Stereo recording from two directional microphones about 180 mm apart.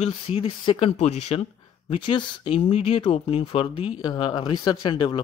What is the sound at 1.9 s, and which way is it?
Speech, 25° left (ahead or behind).